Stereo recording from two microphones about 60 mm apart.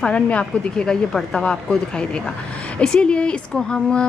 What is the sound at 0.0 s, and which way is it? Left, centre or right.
A woman's voice, centre.